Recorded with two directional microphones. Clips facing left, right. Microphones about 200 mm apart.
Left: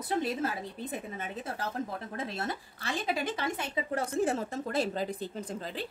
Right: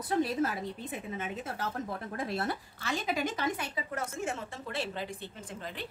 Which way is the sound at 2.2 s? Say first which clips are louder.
Right 3 dB; 25° left (ahead or behind).